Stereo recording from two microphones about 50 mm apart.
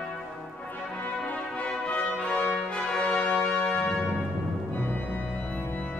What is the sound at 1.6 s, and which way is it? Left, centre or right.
Brass instrument, left.